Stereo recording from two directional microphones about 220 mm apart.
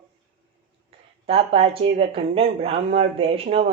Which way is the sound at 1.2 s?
25° right (ahead or behind).